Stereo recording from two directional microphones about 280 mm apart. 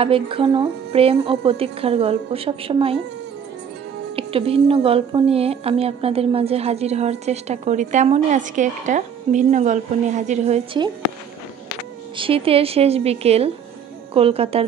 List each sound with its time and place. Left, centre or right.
0.0 s a woman's voice: centre
4.1 s a woman's voice: centre
12.2 s a woman's voice: centre